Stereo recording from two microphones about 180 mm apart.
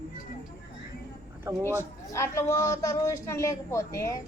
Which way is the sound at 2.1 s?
15° left (ahead or behind).